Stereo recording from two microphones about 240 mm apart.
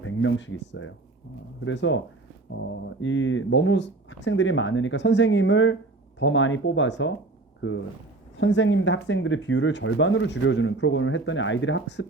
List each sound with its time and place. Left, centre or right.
0.0 s speech: left
8.4 s speech: left